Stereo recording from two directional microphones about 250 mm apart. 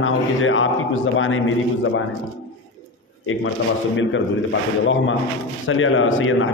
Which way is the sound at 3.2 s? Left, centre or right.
Left.